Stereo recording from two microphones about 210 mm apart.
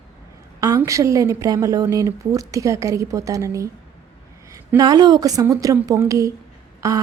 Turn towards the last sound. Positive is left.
turn(degrees=-15)  # may be behind; listen again after turning